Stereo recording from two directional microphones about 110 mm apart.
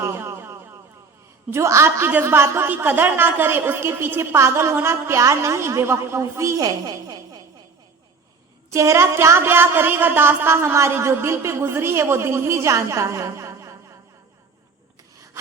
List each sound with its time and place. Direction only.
0.0 s a sound: 25° right (ahead or behind)
1.5 s a woman's voice: 25° right (ahead or behind)
8.7 s a woman's voice: 25° right (ahead or behind)